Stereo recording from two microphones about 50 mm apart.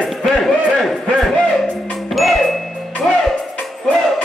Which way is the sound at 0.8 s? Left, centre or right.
Centre.